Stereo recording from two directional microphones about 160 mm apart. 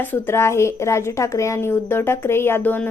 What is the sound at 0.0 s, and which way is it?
A woman's voice, 15° left (ahead or behind).